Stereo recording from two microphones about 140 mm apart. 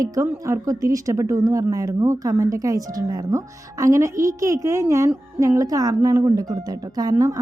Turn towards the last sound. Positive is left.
turn(degrees=-25)  # may be behind; listen again after turning